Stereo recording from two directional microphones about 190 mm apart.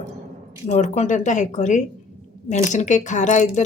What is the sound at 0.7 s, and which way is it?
A woman's voice, 35° left (ahead or behind).